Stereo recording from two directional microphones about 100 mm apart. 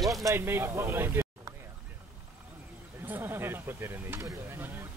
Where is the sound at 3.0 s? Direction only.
20° right (ahead or behind).